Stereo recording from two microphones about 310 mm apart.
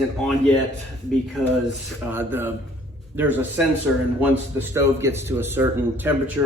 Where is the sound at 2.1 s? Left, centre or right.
Centre.